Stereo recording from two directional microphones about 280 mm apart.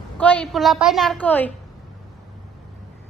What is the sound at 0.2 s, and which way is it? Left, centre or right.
A woman's voice, centre.